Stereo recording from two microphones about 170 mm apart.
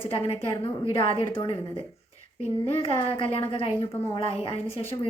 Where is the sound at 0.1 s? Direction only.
35° left (ahead or behind).